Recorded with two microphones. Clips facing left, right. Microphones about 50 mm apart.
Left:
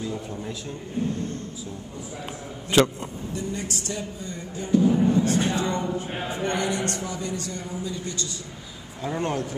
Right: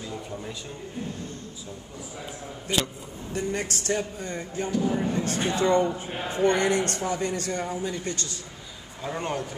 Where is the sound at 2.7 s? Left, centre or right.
Left.